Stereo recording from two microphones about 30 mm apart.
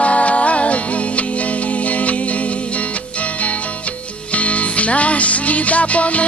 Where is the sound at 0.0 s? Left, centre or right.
Left.